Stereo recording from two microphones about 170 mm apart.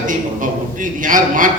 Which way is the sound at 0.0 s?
50° right (ahead or behind).